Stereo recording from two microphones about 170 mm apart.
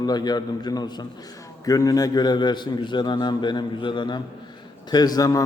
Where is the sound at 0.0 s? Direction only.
25° left (ahead or behind).